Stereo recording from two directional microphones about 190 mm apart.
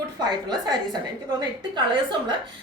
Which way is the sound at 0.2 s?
20° right (ahead or behind).